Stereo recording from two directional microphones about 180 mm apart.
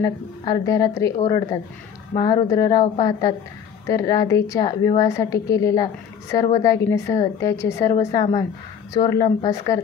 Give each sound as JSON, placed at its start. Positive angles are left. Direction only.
{"t": 0.0, "sound": "a woman's voice", "side_deg": 20}